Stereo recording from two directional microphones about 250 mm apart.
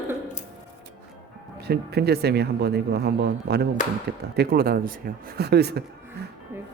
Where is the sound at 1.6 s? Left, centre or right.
Right.